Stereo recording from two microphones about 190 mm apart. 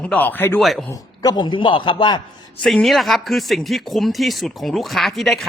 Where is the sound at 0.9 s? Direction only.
20° left (ahead or behind).